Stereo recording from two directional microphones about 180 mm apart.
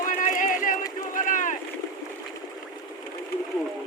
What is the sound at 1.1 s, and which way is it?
Boat, 45° left (ahead or behind).